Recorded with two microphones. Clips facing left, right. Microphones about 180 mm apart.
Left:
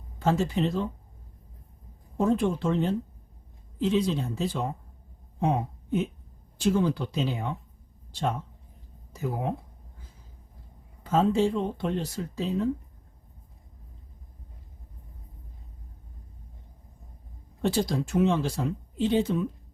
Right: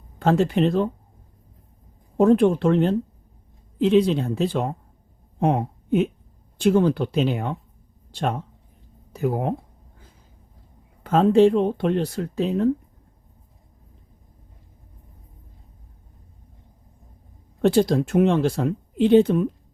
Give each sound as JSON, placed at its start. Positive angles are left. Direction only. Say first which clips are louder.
{"t": 0.2, "sound": "speech", "louder": "right 6 dB", "side_deg": -65}
{"t": 2.1, "sound": "speech", "louder": "right 8 dB", "side_deg": -65}
{"t": 11.0, "sound": "speech", "louder": "right 8 dB", "side_deg": -60}
{"t": 17.6, "sound": "speech", "louder": "right 8 dB", "side_deg": -60}